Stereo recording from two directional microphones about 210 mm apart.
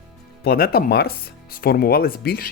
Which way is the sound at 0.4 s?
45° left (ahead or behind).